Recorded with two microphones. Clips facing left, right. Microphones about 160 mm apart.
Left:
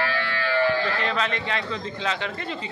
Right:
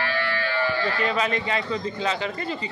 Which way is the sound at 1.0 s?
5° right (ahead or behind).